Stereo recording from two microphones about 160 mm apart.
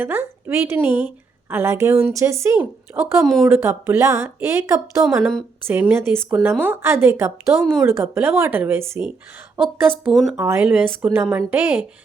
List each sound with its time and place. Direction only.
0.0 s a woman's voice: 10° right (ahead or behind)
7.6 s speech: centre (ahead or behind)
7.9 s a woman's voice: 15° right (ahead or behind)
10.0 s speech: centre (ahead or behind)
10.3 s a woman's voice: 15° right (ahead or behind)